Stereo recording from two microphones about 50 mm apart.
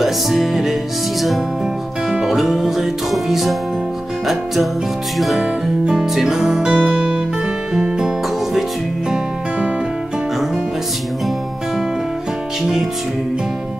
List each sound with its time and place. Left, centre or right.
0.0 s music: centre
2.2 s music: centre
5.2 s music: centre